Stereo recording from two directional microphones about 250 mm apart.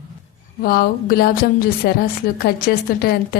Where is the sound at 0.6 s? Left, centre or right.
Left.